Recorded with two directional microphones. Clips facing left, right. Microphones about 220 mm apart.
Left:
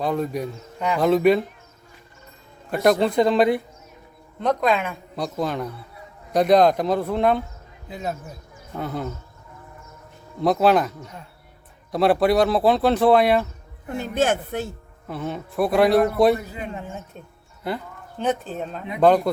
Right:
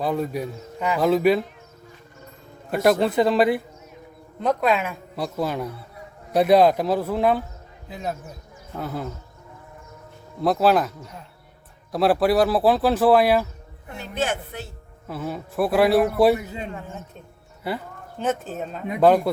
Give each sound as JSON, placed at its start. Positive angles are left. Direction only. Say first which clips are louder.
{"t": 0.0, "sound": "speech", "louder": "left 1 dB", "side_deg": -5}
{"t": 2.8, "sound": "speech", "louder": "left 1 dB", "side_deg": -5}
{"t": 10.4, "sound": "speech", "louder": "left 1 dB", "side_deg": 0}
{"t": 13.8, "sound": "speech", "louder": "left 5 dB", "side_deg": 50}
{"t": 15.0, "sound": "speech", "louder": "left 1 dB", "side_deg": 0}
{"t": 16.4, "sound": "a man's voice", "louder": "right 1 dB", "side_deg": -25}
{"t": 18.2, "sound": "speech", "louder": "left 1 dB", "side_deg": 0}